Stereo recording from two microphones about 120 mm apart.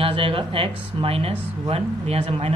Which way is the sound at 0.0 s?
50° right (ahead or behind).